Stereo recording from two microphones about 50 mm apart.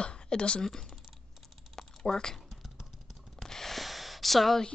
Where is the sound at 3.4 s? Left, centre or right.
Centre.